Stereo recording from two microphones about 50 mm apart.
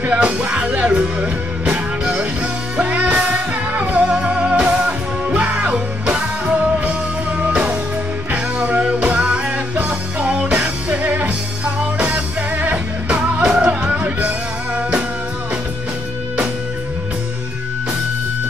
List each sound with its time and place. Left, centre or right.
0.0 s music: right
3.8 s music: right
4.1 s music: centre